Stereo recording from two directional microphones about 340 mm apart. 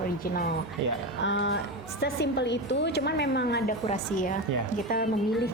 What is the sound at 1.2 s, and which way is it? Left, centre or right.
A woman's voice, left.